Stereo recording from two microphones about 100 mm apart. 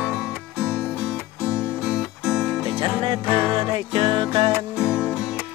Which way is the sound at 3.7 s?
60° right (ahead or behind).